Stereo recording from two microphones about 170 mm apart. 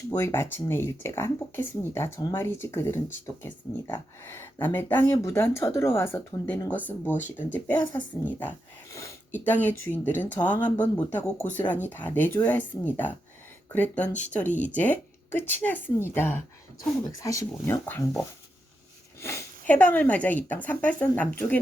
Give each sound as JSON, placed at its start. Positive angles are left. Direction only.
{"t": 0.1, "sound": "speech", "side_deg": 15}
{"t": 19.2, "sound": "speech", "side_deg": 15}